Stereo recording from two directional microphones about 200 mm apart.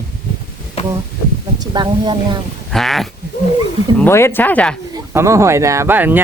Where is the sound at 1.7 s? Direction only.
20° right (ahead or behind).